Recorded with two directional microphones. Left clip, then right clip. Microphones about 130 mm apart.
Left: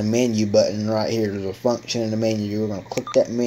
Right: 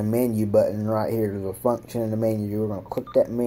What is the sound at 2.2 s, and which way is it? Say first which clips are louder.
Speech: even; 5° right (ahead or behind).